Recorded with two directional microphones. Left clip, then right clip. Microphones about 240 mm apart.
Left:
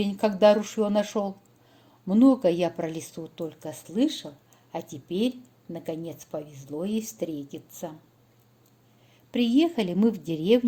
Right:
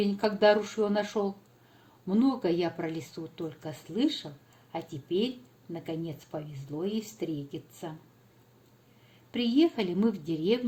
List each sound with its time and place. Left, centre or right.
0.0 s speech: left
2.0 s a woman's voice: left
9.3 s speech: left